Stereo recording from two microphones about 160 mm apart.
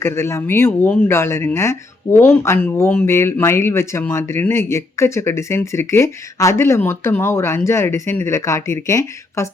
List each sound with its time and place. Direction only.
0.0 s speech: 15° left (ahead or behind)